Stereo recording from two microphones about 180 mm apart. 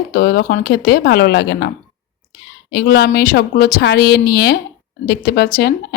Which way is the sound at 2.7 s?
60° left (ahead or behind).